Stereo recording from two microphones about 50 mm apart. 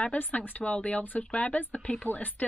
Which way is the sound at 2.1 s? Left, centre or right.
Left.